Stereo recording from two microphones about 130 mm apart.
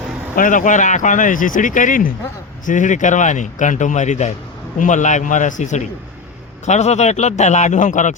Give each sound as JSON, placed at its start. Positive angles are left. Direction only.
{"t": 0.3, "sound": "speech", "side_deg": 85}
{"t": 2.6, "sound": "speech", "side_deg": 75}
{"t": 6.7, "sound": "speech", "side_deg": 60}